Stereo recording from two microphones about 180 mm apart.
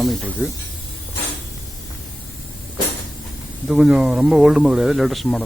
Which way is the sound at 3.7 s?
5° right (ahead or behind).